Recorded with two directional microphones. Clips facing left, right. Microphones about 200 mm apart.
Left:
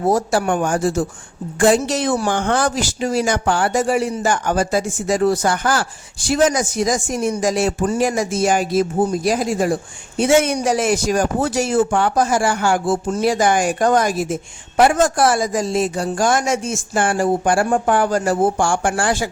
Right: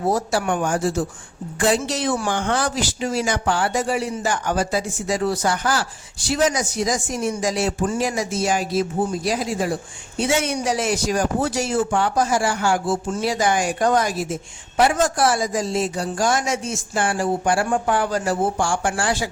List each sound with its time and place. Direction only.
0.1 s speech: 50° left (ahead or behind)